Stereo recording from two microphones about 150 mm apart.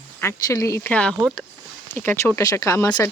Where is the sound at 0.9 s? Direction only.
10° left (ahead or behind).